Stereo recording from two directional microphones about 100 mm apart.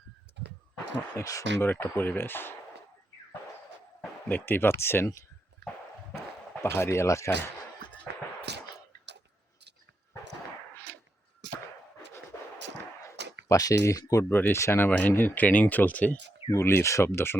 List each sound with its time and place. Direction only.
1.1 s speech: 35° left (ahead or behind)
1.6 s speech: 20° left (ahead or behind)
4.3 s speech: 20° left (ahead or behind)
6.6 s speech: 25° left (ahead or behind)
13.5 s speech: 35° left (ahead or behind)
14.3 s speech: 20° left (ahead or behind)
14.8 s speech: 15° left (ahead or behind)
16.5 s speech: 30° left (ahead or behind)